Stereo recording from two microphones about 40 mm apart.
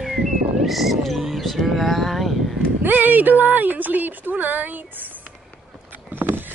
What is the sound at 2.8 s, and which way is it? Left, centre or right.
Speech, right.